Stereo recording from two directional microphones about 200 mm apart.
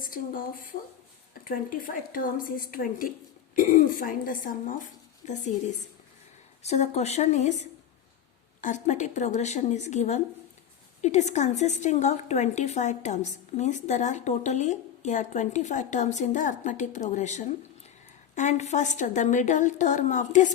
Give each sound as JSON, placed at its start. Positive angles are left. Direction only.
{"t": 0.0, "sound": "a woman's voice", "side_deg": 45}
{"t": 6.6, "sound": "a woman's voice", "side_deg": 35}